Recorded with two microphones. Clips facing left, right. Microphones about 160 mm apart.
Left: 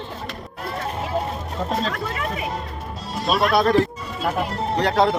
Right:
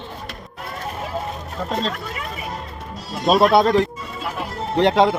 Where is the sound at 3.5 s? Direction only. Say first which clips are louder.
Right 2 dB; 25° right (ahead or behind).